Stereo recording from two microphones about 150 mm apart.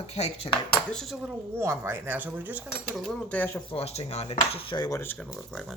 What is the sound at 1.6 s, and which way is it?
Speech, 20° right (ahead or behind).